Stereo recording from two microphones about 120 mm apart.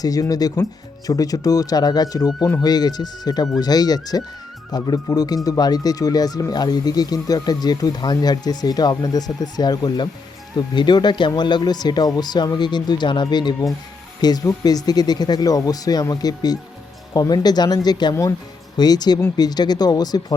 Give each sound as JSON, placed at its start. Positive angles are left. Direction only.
{"t": 0.0, "sound": "speech", "side_deg": 30}